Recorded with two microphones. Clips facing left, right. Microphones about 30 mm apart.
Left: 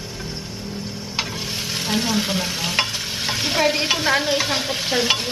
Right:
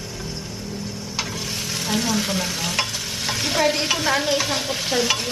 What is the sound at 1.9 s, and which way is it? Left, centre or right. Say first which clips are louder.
Stir: left 1 dB; centre.